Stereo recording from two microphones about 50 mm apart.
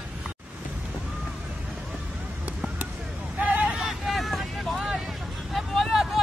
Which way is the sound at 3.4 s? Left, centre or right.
Right.